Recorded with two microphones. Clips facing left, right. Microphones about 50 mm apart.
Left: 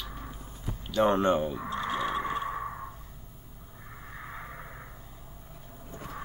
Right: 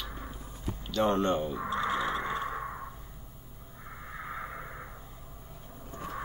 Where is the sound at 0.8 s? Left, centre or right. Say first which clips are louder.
Left 3 dB; centre.